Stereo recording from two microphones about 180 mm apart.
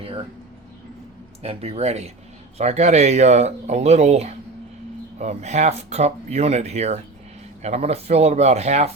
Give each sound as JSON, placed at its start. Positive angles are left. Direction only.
{"t": 1.4, "sound": "speech", "side_deg": -35}